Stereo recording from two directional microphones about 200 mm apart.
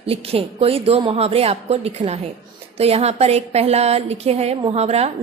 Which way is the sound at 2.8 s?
30° right (ahead or behind).